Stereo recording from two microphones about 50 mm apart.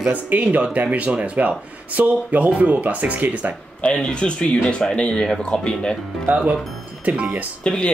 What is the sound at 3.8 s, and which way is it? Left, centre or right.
Speech, centre.